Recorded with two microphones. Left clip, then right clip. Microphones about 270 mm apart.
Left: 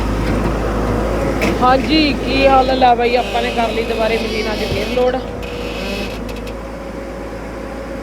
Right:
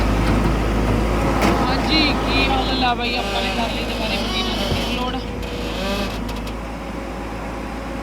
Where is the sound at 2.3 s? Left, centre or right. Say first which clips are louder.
Left 8 dB; centre.